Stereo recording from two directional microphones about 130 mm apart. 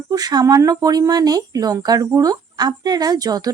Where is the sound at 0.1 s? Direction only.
30° right (ahead or behind).